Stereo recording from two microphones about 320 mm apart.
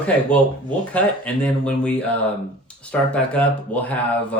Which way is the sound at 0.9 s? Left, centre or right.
Centre.